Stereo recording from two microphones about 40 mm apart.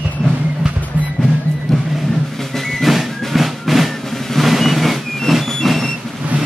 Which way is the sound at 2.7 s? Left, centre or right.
Centre.